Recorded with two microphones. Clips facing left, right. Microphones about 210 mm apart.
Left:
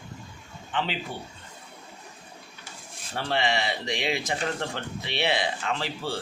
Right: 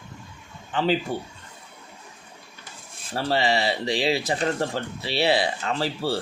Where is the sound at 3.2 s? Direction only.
35° right (ahead or behind).